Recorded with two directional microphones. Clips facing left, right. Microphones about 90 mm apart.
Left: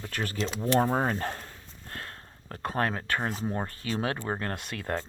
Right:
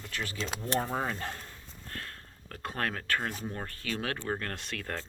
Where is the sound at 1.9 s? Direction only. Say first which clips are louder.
Left 2 dB; 30° left (ahead or behind).